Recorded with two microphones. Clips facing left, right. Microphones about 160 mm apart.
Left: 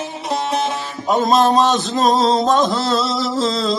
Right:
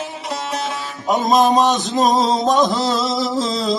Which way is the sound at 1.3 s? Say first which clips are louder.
Right 1 dB; 15° right (ahead or behind).